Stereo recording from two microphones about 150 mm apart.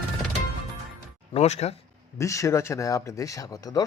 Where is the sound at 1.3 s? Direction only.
45° left (ahead or behind).